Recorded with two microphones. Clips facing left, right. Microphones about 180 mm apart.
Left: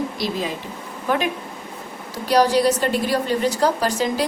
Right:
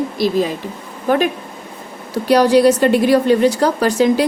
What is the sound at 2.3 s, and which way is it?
A woman's voice, 65° right (ahead or behind).